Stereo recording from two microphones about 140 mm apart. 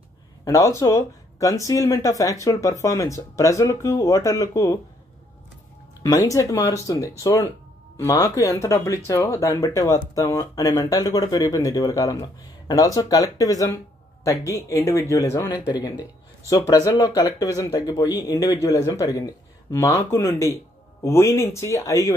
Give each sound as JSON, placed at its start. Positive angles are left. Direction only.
{"t": 0.5, "sound": "speech", "side_deg": 25}
{"t": 6.0, "sound": "speech", "side_deg": 25}